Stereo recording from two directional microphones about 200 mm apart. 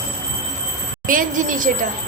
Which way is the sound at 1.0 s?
40° right (ahead or behind).